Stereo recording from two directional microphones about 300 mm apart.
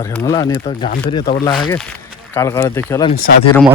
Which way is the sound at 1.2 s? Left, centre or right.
Left.